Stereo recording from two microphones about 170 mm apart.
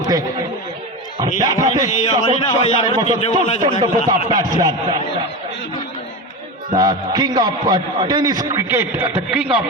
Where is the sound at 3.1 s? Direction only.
35° left (ahead or behind).